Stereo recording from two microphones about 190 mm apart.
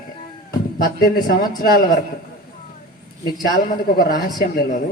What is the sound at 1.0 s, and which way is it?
A man's voice, 50° left (ahead or behind).